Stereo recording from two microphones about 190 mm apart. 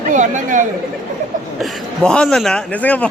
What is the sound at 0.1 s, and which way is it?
Speech, 40° right (ahead or behind).